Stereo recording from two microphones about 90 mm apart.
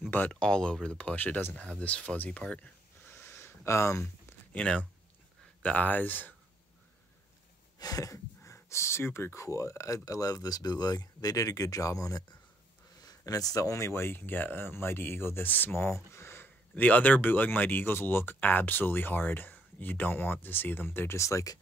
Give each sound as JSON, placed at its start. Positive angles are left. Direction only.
{"t": 0.3, "sound": "speech", "side_deg": 10}
{"t": 4.5, "sound": "speech", "side_deg": 10}
{"t": 7.8, "sound": "speech", "side_deg": 40}